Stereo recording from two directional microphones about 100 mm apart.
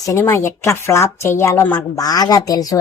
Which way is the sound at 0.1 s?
30° left (ahead or behind).